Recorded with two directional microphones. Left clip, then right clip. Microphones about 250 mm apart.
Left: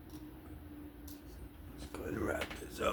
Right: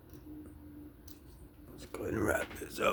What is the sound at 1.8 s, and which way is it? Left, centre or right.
Speech, right.